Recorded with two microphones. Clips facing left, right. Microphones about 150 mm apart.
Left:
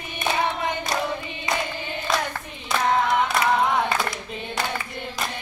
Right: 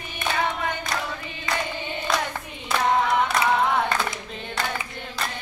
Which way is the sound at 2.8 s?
Centre (ahead or behind).